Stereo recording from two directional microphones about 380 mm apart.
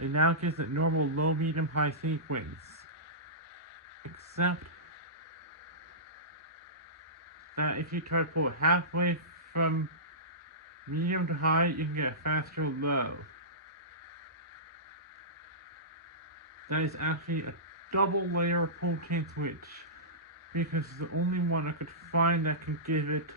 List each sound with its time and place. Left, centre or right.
0.0 s a man's voice: right
7.5 s speech: right
10.9 s speech: right
17.1 s a man's voice: right